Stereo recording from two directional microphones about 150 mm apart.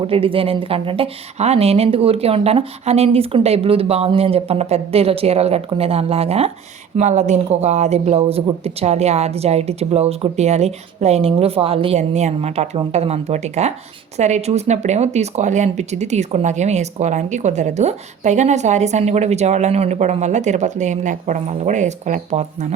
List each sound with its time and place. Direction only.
0.1 s a woman's voice: 35° right (ahead or behind)